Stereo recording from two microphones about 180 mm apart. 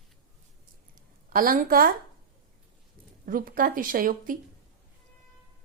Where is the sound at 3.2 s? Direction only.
50° right (ahead or behind).